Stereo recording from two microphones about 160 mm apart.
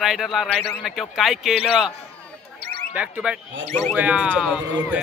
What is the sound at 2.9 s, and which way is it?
Speech, 5° right (ahead or behind).